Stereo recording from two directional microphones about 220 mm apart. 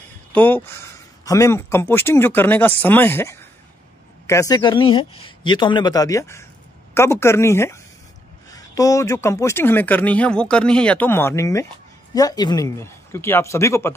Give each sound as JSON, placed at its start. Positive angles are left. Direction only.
{"t": 0.3, "sound": "speech", "side_deg": 10}
{"t": 4.8, "sound": "speech", "side_deg": 75}
{"t": 5.2, "sound": "a man's voice", "side_deg": 20}